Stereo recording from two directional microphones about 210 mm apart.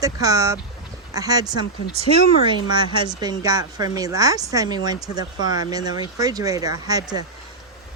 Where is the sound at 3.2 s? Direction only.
15° right (ahead or behind).